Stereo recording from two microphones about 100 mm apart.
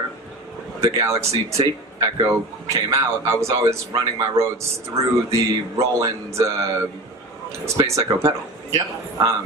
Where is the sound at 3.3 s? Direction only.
30° right (ahead or behind).